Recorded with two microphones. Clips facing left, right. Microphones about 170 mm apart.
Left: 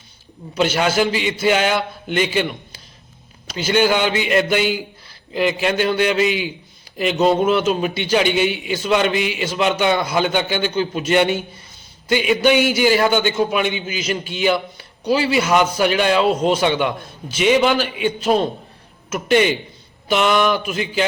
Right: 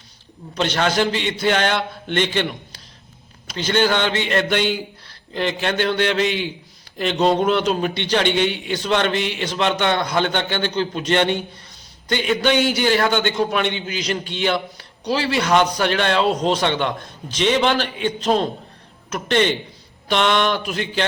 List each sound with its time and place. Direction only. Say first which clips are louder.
0.5 s a man's voice: left 2 dB; 10° left (ahead or behind)